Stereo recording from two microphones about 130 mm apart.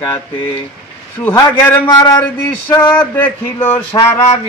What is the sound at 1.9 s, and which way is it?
Male singing, 35° left (ahead or behind).